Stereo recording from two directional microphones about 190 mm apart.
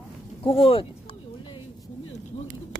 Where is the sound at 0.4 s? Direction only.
30° left (ahead or behind).